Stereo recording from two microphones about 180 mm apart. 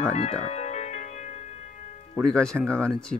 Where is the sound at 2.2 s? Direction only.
5° left (ahead or behind).